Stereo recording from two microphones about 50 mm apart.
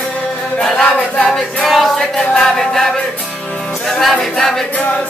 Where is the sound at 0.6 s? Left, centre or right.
Centre.